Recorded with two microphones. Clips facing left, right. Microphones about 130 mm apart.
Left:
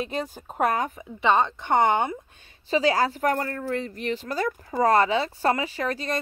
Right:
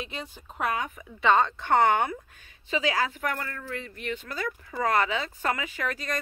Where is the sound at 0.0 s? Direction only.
45° left (ahead or behind).